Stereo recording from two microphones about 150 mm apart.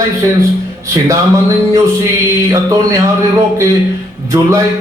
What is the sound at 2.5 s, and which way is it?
Speech, 20° right (ahead or behind).